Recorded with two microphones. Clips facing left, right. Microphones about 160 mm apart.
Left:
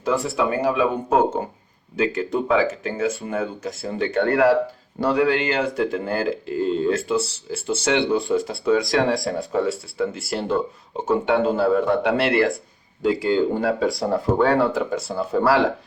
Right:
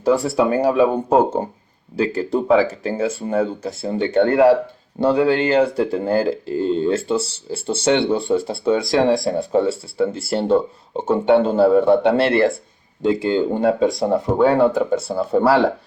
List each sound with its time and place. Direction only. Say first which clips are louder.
0.0 s speech: right 5 dB; 35° right (ahead or behind)
2.0 s speech: right 2 dB; 35° right (ahead or behind)